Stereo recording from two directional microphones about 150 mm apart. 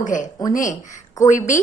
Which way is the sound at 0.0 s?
60° left (ahead or behind).